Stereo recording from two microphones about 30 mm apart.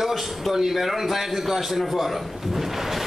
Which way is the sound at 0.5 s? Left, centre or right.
Centre.